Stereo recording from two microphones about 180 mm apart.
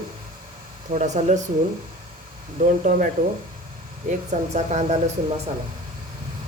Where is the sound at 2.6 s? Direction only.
45° right (ahead or behind).